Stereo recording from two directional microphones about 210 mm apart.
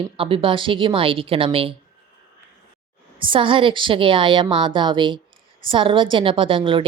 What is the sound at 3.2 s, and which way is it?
A woman's voice, 25° right (ahead or behind).